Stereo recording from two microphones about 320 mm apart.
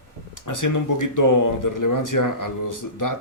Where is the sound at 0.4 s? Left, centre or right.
Left.